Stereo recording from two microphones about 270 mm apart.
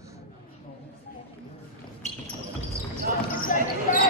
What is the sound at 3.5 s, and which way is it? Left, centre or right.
Basketball bounce, left.